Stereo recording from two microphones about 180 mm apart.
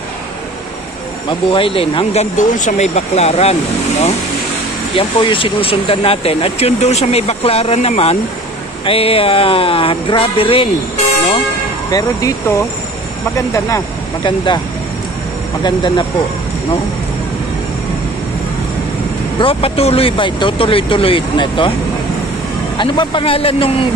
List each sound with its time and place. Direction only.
1.5 s speech: 30° left (ahead or behind)
2.3 s speech: 45° left (ahead or behind)
4.9 s speech: 30° left (ahead or behind)
11.9 s speech: 20° left (ahead or behind)
15.6 s speech: 25° left (ahead or behind)
19.4 s speech: 30° left (ahead or behind)
22.8 s speech: 25° left (ahead or behind)